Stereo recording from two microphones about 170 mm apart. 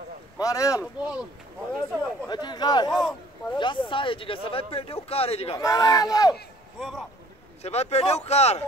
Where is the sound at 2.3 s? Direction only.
25° left (ahead or behind).